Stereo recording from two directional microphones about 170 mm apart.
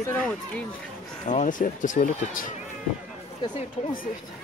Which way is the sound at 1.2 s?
50° left (ahead or behind).